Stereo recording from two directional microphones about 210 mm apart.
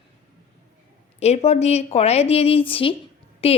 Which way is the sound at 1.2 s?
30° left (ahead or behind).